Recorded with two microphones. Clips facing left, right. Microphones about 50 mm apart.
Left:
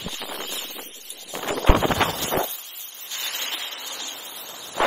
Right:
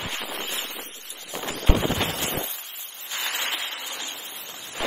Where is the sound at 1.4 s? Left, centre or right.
Left.